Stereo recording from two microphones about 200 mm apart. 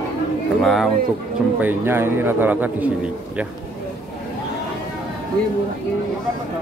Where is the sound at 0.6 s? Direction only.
Centre (ahead or behind).